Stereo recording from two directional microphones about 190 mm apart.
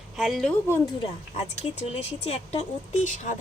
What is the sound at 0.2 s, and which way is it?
Speech, centre (ahead or behind).